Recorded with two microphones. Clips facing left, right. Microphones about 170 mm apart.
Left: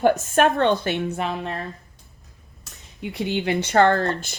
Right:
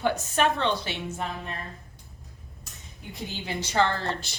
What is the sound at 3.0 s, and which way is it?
Speech, 70° left (ahead or behind).